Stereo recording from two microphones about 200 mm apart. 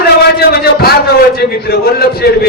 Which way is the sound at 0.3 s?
50° left (ahead or behind).